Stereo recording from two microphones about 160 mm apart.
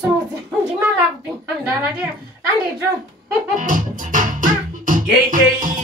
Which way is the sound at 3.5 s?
55° right (ahead or behind).